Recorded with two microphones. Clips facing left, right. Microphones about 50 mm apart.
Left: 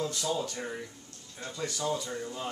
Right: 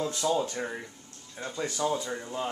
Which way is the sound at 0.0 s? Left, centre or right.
Right.